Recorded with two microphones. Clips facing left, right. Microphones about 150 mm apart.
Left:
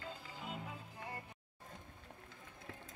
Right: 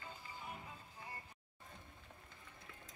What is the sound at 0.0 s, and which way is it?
Music, 85° left.